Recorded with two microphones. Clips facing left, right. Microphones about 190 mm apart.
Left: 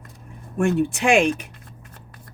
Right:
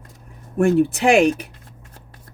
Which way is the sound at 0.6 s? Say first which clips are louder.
Right 4 dB; 35° right (ahead or behind).